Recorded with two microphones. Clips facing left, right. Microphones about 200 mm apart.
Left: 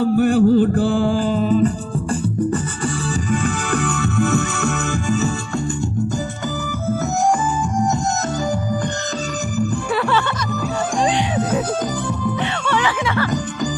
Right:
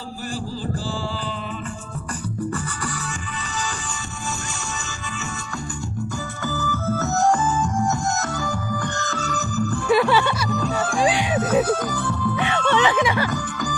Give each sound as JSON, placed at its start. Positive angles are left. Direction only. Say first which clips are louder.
{"t": 0.0, "sound": "music", "louder": "left 17 dB", "side_deg": 60}
{"t": 3.4, "sound": "music", "louder": "left 10 dB", "side_deg": 60}
{"t": 9.9, "sound": "music", "louder": "right 4 dB", "side_deg": -10}
{"t": 12.4, "sound": "music", "louder": "right 5 dB", "side_deg": -20}